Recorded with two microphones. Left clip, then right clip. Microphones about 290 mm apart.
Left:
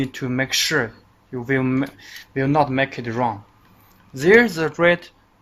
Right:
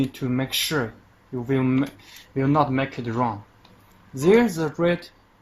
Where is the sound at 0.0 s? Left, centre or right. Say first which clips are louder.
Left 3 dB; left.